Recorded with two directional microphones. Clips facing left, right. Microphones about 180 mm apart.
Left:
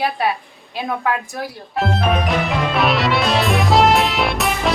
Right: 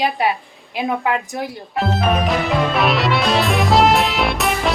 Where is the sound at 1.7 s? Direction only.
Centre (ahead or behind).